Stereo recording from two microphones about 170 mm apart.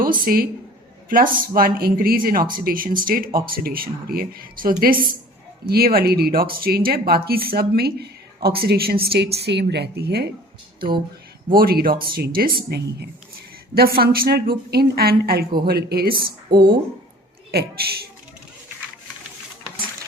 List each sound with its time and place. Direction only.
0.0 s speech: 60° right (ahead or behind)
11.4 s speech: 60° right (ahead or behind)
13.7 s speech: 60° right (ahead or behind)
17.5 s a woman's voice: 65° right (ahead or behind)